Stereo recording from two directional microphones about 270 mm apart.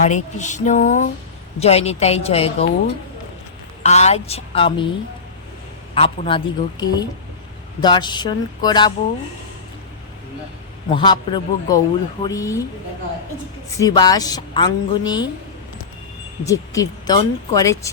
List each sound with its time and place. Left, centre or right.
0.0 s speech: left
3.8 s speech: left
5.9 s a woman's voice: centre
10.9 s a woman's voice: centre
13.7 s a woman's voice: centre
16.5 s a woman's voice: centre